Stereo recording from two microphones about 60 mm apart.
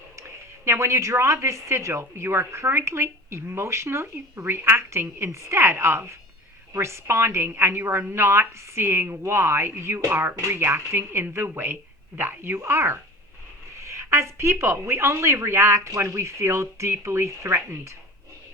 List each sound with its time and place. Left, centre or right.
0.2 s a woman's voice: right